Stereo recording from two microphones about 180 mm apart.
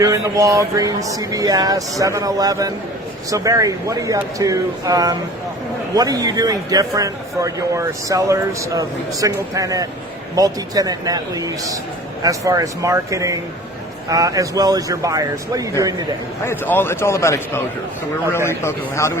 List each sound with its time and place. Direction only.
0.0 s a man's voice: 20° right (ahead or behind)
16.4 s a man's voice: 10° left (ahead or behind)